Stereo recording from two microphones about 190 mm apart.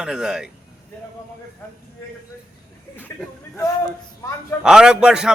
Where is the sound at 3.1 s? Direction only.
15° left (ahead or behind).